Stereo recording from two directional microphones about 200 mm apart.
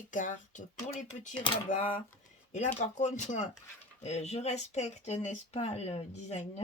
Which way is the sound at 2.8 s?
35° left (ahead or behind).